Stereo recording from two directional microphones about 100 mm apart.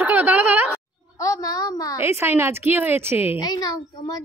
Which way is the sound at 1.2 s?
35° left (ahead or behind).